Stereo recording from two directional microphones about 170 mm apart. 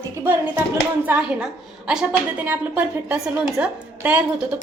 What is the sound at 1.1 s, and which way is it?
A woman's voice, 5° right (ahead or behind).